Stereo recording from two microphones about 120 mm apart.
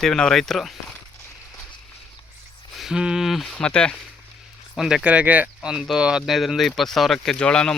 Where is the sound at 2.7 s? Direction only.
5° right (ahead or behind).